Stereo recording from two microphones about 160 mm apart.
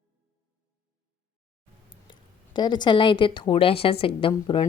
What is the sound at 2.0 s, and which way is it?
Speech, 25° left (ahead or behind).